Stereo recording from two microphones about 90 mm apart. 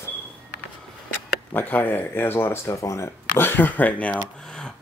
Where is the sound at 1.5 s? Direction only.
20° left (ahead or behind).